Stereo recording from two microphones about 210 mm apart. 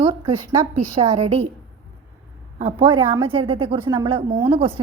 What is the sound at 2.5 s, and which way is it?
A woman's voice, 25° right (ahead or behind).